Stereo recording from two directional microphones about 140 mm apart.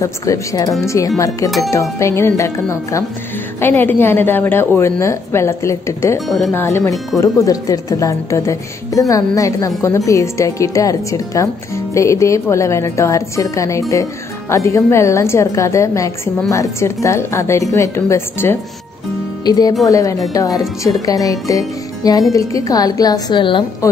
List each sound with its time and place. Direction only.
0.0 s a woman's voice: 20° left (ahead or behind)
6.2 s speech: centre (ahead or behind)
6.5 s a woman's voice: 20° left (ahead or behind)
19.4 s a woman's voice: 30° left (ahead or behind)
23.8 s a woman's voice: 20° left (ahead or behind)